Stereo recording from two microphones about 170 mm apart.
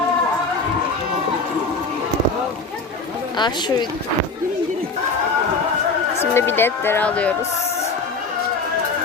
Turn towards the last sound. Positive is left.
turn(degrees=10)  # may be behind; listen again after turning